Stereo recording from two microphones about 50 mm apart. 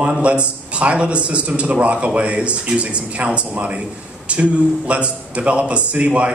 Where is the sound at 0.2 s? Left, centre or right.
Right.